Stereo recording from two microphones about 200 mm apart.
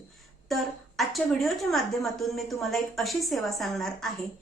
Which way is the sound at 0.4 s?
Centre (ahead or behind).